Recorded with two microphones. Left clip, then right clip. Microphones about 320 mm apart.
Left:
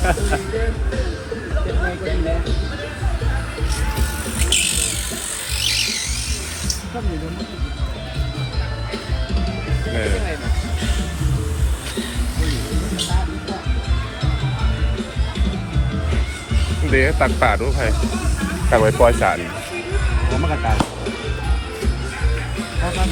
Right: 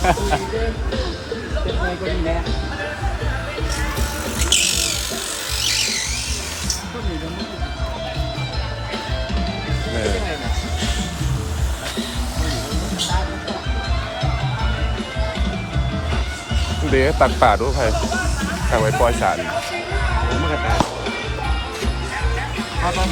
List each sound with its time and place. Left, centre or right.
0.0 s music: right
4.4 s music: right
16.9 s speech: centre